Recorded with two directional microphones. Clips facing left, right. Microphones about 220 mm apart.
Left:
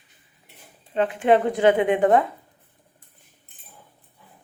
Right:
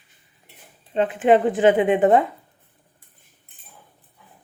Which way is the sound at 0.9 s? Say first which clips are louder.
Right 2 dB; 20° right (ahead or behind).